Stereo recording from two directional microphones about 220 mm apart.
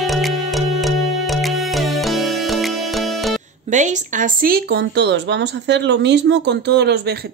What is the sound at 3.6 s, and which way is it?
Speech, 35° right (ahead or behind).